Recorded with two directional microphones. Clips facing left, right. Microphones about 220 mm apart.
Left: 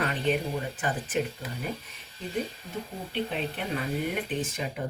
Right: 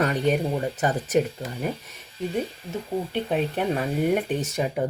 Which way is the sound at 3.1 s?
50° right (ahead or behind).